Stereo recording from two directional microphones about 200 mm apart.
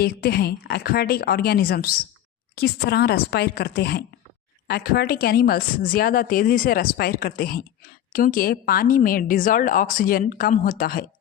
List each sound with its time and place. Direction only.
0.0 s a woman's voice: 50° left (ahead or behind)